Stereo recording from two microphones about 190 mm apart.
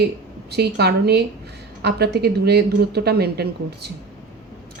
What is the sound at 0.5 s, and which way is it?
A woman's voice, 60° right (ahead or behind).